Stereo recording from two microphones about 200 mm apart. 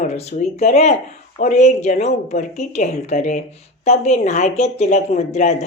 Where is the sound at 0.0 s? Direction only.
35° left (ahead or behind).